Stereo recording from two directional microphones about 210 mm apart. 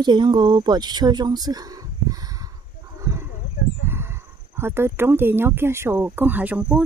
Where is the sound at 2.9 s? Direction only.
15° right (ahead or behind).